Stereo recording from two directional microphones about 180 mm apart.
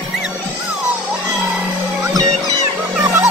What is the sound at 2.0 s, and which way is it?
Music, 20° right (ahead or behind).